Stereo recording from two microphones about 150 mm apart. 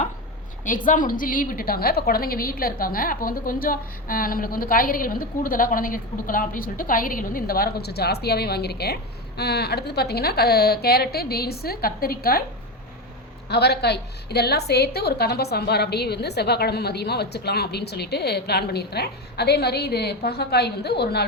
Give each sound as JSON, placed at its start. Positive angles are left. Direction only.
{"t": 0.9, "sound": "a woman's voice", "side_deg": 65}
{"t": 13.5, "sound": "a woman's voice", "side_deg": 90}